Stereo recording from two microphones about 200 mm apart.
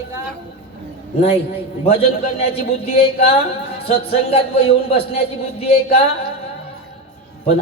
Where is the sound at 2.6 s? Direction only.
30° left (ahead or behind).